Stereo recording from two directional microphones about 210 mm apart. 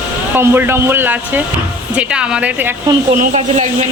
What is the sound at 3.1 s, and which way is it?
Speech, 35° right (ahead or behind).